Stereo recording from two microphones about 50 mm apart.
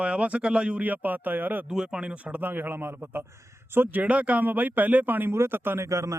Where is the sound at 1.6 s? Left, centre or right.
Centre.